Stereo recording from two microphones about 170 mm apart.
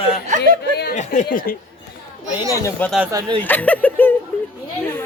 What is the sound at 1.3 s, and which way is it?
Speech, 60° left (ahead or behind).